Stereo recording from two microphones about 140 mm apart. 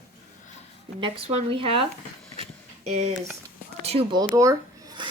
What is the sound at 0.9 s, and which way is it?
Speech, 35° right (ahead or behind).